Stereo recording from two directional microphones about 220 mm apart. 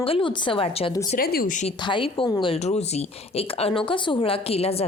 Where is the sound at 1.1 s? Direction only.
40° left (ahead or behind).